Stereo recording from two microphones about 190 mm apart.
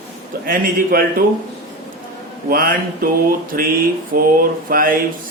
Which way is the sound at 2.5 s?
50° right (ahead or behind).